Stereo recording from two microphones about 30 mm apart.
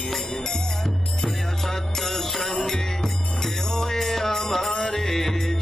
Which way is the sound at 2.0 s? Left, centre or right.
Centre.